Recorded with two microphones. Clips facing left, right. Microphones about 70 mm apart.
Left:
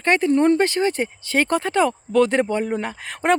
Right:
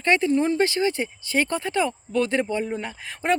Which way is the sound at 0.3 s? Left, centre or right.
Left.